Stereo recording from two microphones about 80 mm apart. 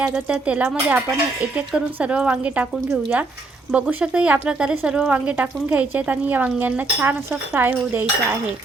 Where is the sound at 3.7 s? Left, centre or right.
Centre.